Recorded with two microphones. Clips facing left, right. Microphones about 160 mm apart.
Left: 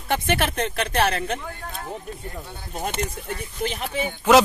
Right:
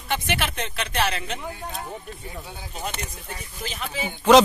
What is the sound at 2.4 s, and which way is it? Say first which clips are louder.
Speech: even; 10° right (ahead or behind).